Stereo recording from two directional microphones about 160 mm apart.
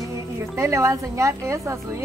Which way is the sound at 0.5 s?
20° right (ahead or behind).